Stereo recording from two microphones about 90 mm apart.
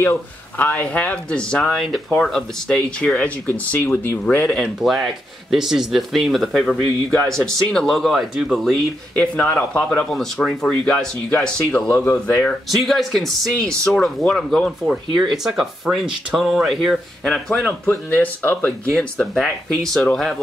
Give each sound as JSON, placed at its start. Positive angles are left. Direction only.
{"t": 0.0, "sound": "speech", "side_deg": 25}
{"t": 4.7, "sound": "speech", "side_deg": 0}
{"t": 9.1, "sound": "speech", "side_deg": 10}
{"t": 12.6, "sound": "speech", "side_deg": 0}
{"t": 17.8, "sound": "speech", "side_deg": 20}
{"t": 18.9, "sound": "speech", "side_deg": 10}